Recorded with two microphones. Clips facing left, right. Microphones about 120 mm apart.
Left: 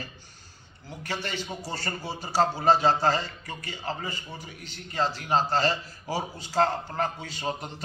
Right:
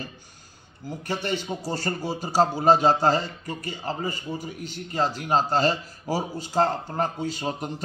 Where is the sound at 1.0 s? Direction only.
45° right (ahead or behind).